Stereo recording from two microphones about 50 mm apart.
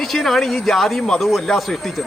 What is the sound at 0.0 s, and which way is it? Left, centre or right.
Speech, centre.